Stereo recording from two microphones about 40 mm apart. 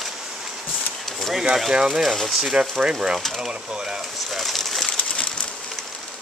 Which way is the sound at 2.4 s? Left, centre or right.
Right.